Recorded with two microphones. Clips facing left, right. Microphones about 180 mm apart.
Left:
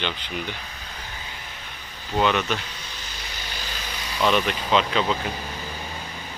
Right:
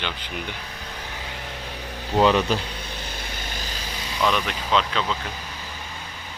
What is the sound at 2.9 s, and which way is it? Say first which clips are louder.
Vehicle: right 4 dB; 55° right (ahead or behind).